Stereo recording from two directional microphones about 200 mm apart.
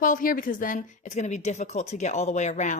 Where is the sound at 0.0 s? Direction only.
45° left (ahead or behind).